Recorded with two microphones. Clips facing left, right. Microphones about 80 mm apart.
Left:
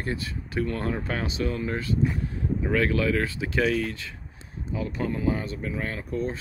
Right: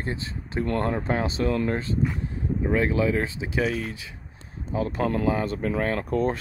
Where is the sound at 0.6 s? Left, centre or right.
Right.